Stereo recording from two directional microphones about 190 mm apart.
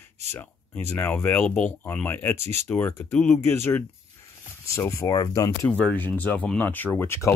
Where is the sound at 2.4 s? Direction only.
35° right (ahead or behind).